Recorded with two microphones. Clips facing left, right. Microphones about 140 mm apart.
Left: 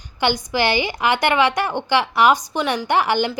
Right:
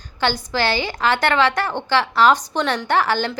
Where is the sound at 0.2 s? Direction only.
15° left (ahead or behind).